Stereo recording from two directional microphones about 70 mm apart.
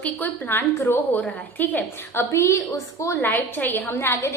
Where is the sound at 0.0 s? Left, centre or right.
Left.